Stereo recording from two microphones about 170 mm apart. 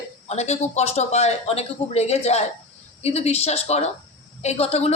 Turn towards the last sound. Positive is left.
turn(degrees=35)  # may be behind; listen again after turning